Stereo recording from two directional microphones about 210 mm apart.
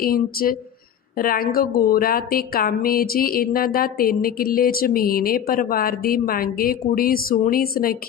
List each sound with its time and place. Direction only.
0.0 s a woman's voice: 45° left (ahead or behind)